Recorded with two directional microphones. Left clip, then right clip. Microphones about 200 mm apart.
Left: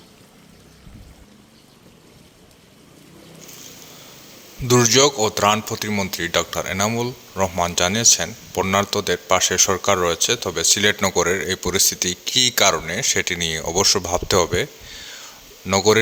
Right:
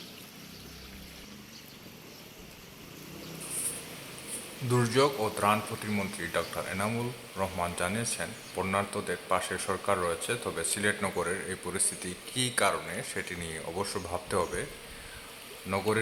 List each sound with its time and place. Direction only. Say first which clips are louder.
4.7 s speech: left 11 dB; 40° left (ahead or behind)
15.7 s speech: left 14 dB; 45° left (ahead or behind)